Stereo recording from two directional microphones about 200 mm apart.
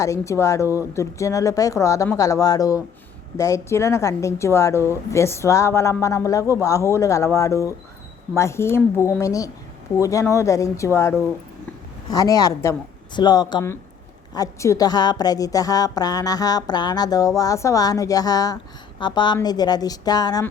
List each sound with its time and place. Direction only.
0.0 s a woman's voice: 15° left (ahead or behind)